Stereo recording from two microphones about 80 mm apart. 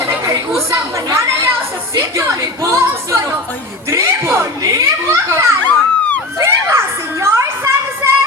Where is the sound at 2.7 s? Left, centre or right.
Right.